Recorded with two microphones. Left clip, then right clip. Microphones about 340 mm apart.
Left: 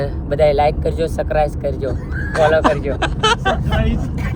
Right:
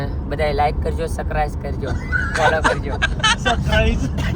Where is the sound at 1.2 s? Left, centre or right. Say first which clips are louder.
Left 7 dB; centre.